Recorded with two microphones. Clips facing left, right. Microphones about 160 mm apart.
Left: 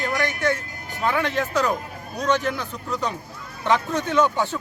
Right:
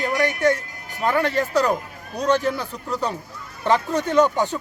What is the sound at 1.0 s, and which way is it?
Speech, 40° right (ahead or behind).